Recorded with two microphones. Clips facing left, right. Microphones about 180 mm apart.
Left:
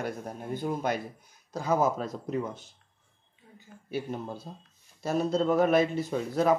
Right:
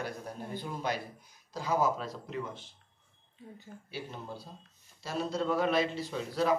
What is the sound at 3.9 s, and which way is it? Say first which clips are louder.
Speech: left 8 dB; 50° left (ahead or behind).